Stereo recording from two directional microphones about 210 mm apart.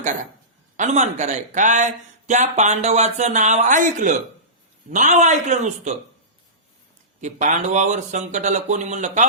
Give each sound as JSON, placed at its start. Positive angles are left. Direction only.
{"t": 0.8, "sound": "speech", "side_deg": -35}
{"t": 7.2, "sound": "speech", "side_deg": -35}